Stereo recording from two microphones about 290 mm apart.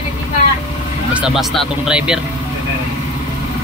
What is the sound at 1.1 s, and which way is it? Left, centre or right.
Speech, centre.